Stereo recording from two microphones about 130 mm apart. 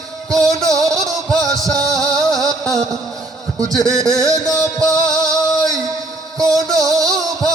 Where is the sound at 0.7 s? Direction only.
25° right (ahead or behind).